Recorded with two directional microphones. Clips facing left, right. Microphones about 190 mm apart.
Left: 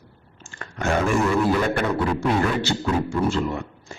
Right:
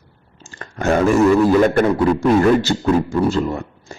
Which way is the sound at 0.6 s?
40° right (ahead or behind).